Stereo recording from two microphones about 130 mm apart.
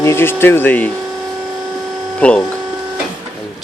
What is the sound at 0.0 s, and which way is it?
Speech, 20° left (ahead or behind).